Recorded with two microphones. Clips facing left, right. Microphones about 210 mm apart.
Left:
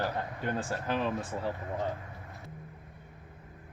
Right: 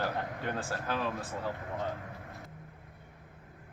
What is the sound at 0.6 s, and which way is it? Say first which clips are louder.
Speech: left 3 dB; 20° left (ahead or behind).